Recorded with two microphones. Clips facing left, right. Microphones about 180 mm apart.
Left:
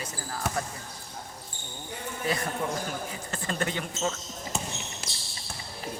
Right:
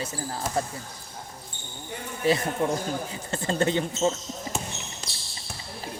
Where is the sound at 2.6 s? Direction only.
25° right (ahead or behind).